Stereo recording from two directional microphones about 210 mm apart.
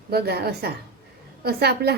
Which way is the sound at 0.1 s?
50° right (ahead or behind).